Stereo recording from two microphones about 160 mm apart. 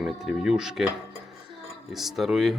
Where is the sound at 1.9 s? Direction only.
Centre (ahead or behind).